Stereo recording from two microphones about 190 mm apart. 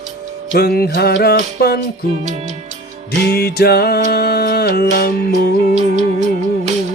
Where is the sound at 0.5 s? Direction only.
55° left (ahead or behind).